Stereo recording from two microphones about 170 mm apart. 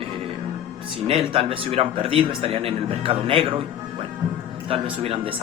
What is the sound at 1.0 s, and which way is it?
Speech, 30° right (ahead or behind).